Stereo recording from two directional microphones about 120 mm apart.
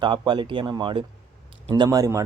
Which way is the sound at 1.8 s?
30° right (ahead or behind).